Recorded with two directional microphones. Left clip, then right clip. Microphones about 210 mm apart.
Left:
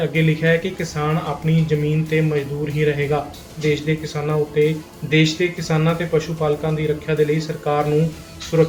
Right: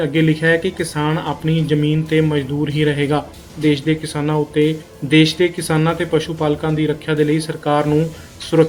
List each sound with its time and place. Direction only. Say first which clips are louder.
0.1 s speech: right 3 dB; 40° right (ahead or behind)